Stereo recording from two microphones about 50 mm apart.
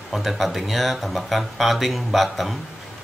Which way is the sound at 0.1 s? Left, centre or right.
Centre.